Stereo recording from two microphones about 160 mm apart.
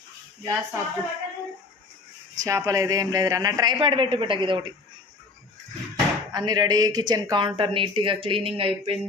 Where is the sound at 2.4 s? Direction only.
20° right (ahead or behind).